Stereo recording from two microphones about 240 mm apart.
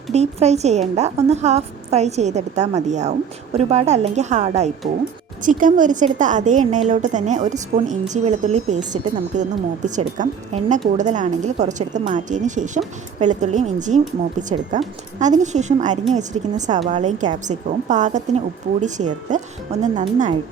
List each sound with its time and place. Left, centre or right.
0.1 s a woman's voice: right